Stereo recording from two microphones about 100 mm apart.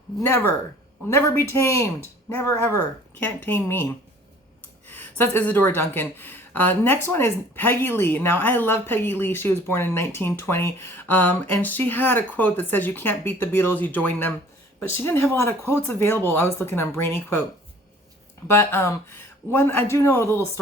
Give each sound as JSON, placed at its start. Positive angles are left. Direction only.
{"t": 0.2, "sound": "speech", "side_deg": 25}
{"t": 2.7, "sound": "speech", "side_deg": 20}
{"t": 4.9, "sound": "speech", "side_deg": 20}
{"t": 18.4, "sound": "speech", "side_deg": 25}